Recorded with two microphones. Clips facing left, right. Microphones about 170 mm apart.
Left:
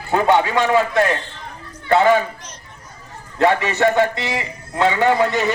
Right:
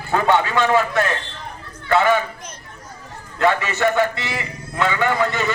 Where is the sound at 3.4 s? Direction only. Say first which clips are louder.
Left 2 dB; 20° left (ahead or behind).